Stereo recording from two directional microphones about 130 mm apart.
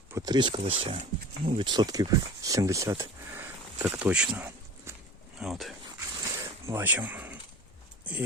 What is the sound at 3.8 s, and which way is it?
Speech, 5° right (ahead or behind).